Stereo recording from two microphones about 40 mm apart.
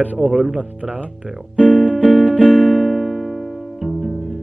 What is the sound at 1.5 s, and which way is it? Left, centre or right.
Music, right.